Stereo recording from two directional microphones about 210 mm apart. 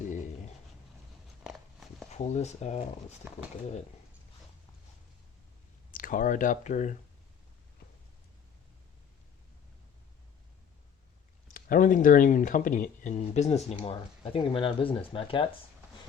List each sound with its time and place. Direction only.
2.0 s speech: 30° left (ahead or behind)
5.9 s speech: 40° left (ahead or behind)
11.4 s speech: 40° left (ahead or behind)